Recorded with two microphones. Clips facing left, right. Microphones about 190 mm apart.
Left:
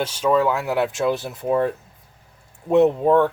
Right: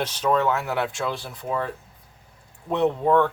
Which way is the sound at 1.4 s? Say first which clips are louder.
Left 7 dB; 20° left (ahead or behind).